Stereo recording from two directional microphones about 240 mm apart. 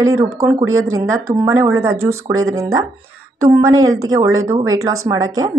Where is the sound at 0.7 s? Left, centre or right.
Right.